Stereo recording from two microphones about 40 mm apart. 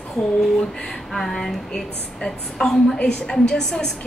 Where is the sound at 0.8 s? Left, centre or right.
Centre.